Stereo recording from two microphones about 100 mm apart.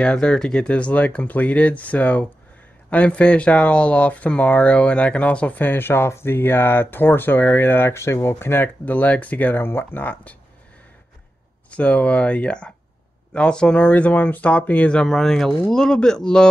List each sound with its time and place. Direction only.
0.0 s speech: 10° left (ahead or behind)
11.7 s speech: 15° left (ahead or behind)